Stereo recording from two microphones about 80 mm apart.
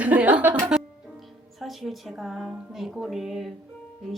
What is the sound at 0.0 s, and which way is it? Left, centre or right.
Music, centre.